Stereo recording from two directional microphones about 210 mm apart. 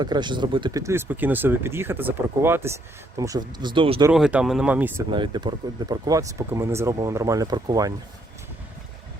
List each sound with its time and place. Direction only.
0.0 s speech: 20° right (ahead or behind)
4.1 s speech: 5° right (ahead or behind)
5.1 s speech: 20° right (ahead or behind)